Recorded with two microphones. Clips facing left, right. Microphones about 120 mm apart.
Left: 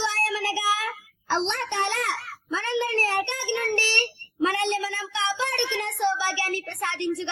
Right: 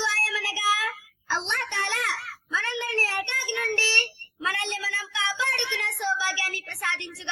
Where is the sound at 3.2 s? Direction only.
20° left (ahead or behind).